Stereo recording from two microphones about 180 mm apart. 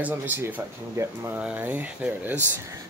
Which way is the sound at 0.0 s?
10° right (ahead or behind).